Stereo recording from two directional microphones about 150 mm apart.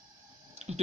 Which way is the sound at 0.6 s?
45° right (ahead or behind).